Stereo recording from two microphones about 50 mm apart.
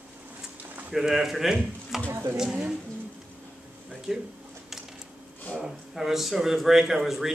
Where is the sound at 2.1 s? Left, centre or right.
Right.